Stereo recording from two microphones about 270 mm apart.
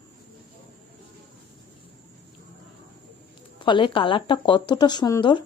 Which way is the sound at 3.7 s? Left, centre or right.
Centre.